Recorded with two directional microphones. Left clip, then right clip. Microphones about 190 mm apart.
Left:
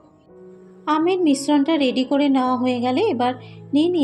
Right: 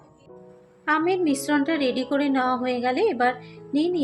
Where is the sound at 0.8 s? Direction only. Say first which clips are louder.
Left 3 dB; 25° left (ahead or behind).